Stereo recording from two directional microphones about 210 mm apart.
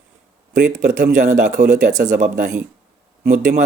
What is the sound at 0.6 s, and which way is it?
Speech, 35° right (ahead or behind).